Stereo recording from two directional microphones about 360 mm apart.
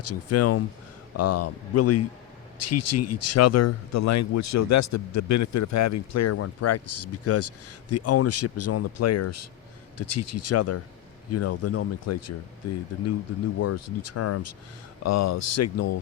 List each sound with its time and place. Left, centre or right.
0.0 s speech: left